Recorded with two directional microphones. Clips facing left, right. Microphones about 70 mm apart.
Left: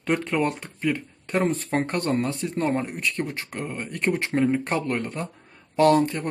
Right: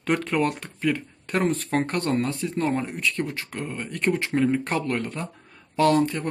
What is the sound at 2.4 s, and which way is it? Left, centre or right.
Speech, left.